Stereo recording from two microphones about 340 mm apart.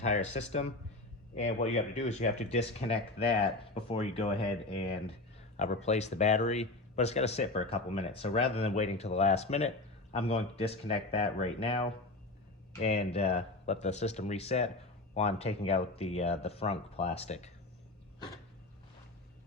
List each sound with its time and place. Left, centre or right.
0.0 s speech: centre
5.5 s speech: centre